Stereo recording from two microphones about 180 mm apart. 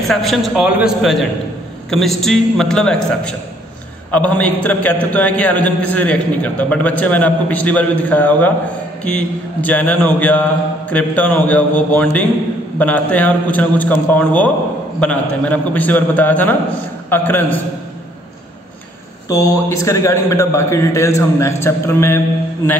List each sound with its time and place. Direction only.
0.1 s a man's voice: centre (ahead or behind)
19.2 s a man's voice: 20° left (ahead or behind)